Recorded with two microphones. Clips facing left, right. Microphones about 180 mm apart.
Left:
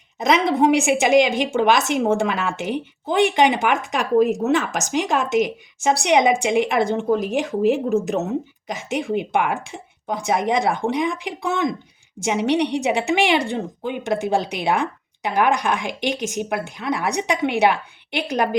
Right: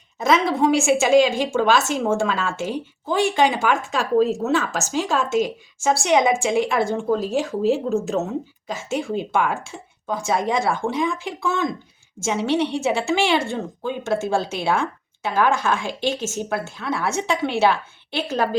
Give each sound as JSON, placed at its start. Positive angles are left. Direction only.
{"t": 0.2, "sound": "a woman's voice", "side_deg": 20}